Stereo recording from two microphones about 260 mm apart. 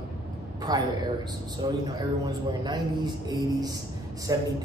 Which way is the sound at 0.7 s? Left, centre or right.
Centre.